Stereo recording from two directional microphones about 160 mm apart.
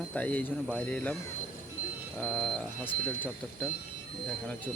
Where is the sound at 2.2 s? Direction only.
5° left (ahead or behind).